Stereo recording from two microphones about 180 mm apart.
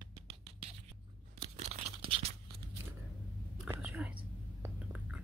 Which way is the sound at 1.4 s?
35° right (ahead or behind).